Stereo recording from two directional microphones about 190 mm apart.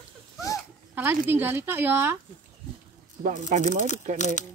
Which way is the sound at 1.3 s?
10° right (ahead or behind).